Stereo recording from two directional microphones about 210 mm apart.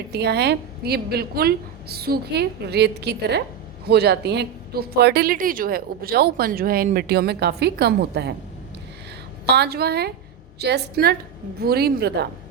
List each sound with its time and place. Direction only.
0.1 s a woman's voice: 50° right (ahead or behind)
9.5 s a woman's voice: 50° right (ahead or behind)